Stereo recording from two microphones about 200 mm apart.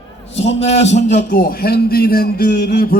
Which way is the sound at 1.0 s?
40° left (ahead or behind).